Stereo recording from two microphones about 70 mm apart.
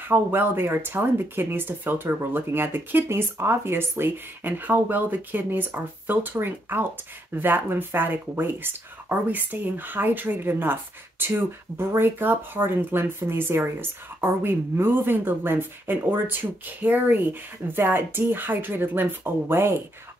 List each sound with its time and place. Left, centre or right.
0.0 s speech: right